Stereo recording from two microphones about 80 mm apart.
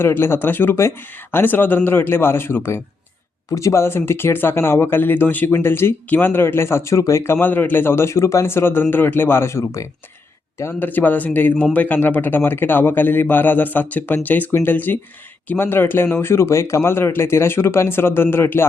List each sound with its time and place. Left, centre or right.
0.0 s speech: left
10.7 s speech: left